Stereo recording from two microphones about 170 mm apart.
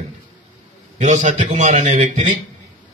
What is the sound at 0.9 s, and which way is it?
A man's voice, 45° right (ahead or behind).